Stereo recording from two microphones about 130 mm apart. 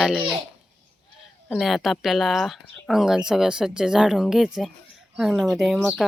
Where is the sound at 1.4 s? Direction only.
Centre (ahead or behind).